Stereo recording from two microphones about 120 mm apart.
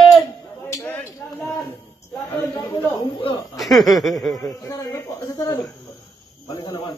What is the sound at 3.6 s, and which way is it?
Chuckle, centre (ahead or behind).